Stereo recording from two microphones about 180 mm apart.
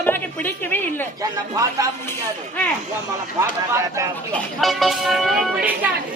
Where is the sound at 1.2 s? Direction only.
20° right (ahead or behind).